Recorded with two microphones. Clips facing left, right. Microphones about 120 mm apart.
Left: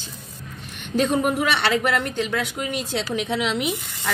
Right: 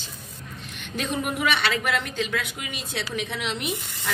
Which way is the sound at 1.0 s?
60° left (ahead or behind).